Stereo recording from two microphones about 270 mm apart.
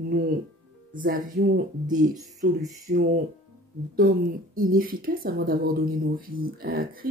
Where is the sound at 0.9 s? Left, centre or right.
Right.